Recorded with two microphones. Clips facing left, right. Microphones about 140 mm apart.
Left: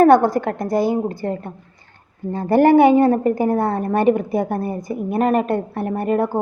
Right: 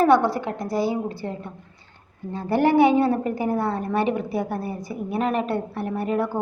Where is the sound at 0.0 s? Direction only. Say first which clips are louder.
Left 5 dB; 45° left (ahead or behind).